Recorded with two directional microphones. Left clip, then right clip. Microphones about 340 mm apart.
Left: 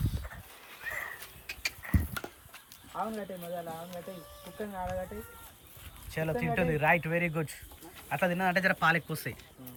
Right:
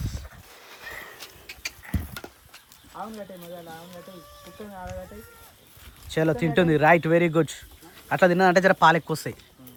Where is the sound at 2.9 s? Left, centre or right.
Left.